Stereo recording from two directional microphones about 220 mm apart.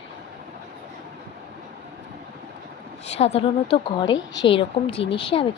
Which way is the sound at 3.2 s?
30° left (ahead or behind).